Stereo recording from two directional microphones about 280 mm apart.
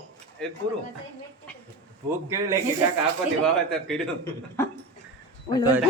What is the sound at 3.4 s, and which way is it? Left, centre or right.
A man's voice, centre.